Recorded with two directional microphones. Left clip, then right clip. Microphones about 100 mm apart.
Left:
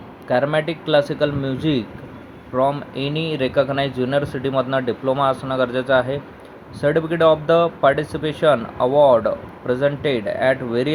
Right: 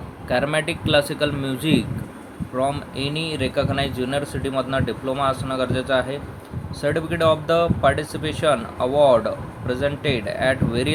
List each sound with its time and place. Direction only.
0.3 s speech: 30° left (ahead or behind)
2.6 s speech: 45° left (ahead or behind)